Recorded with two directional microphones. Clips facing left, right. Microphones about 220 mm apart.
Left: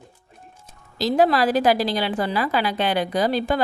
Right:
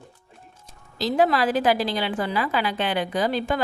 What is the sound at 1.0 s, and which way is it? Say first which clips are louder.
A woman's voice: left 2 dB; 40° left (ahead or behind).